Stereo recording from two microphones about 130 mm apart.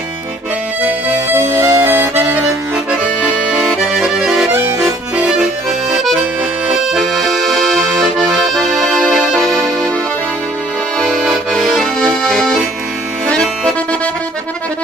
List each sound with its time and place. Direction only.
1.3 s music: 25° right (ahead or behind)
3.5 s accordion: centre (ahead or behind)
4.5 s accordion: 15° right (ahead or behind)
5.1 s accordion: 5° right (ahead or behind)
6.9 s accordion: centre (ahead or behind)
11.0 s accordion: 5° left (ahead or behind)